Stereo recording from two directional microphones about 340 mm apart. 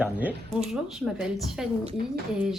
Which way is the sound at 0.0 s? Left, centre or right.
Centre.